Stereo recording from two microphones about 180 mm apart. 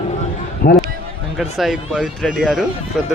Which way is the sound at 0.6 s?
55° left (ahead or behind).